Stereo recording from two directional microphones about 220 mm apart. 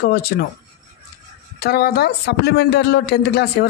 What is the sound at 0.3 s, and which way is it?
Speech, 50° left (ahead or behind).